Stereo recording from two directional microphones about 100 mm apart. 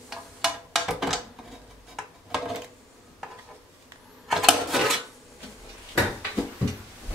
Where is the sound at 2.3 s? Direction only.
5° right (ahead or behind).